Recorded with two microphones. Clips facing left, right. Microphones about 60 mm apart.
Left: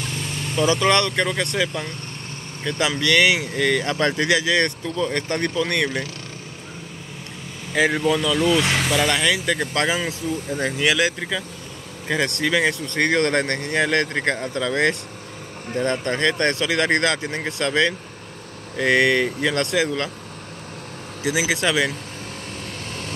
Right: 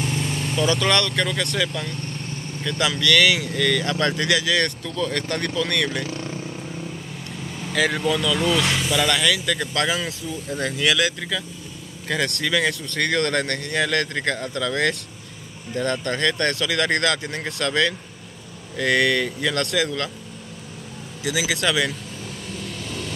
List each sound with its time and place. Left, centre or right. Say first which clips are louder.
0.0 s vehicle: right 3 dB; centre
0.9 s speech: left 2 dB; centre
2.6 s speech: left 1 dB; left
7.9 s speech: left 2 dB; centre
9.1 s speech: left 1 dB; centre
9.9 s speech: left 3 dB; centre
10.8 s speech: left 1 dB; left
21.2 s speech: left 2 dB; left
22.6 s vehicle: right 3 dB; left